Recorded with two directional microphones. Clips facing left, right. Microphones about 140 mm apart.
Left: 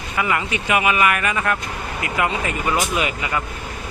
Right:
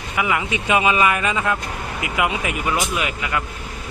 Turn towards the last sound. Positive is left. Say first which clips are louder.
# left 1 dB
turn(degrees=0)  # may be behind; listen again after turning